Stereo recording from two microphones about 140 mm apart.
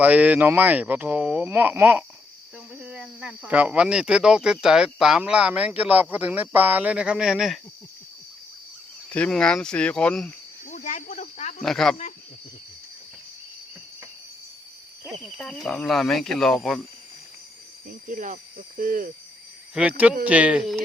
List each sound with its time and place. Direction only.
0.0 s speech: 10° right (ahead or behind)
9.0 s speech: 10° left (ahead or behind)
10.7 s speech: 60° left (ahead or behind)
11.6 s speech: 5° left (ahead or behind)
15.2 s speech: 5° left (ahead or behind)
18.1 s speech: 70° right (ahead or behind)
20.2 s speech: 10° right (ahead or behind)